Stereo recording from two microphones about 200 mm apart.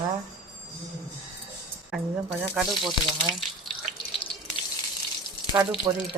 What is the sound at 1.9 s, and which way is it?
Speech, centre (ahead or behind).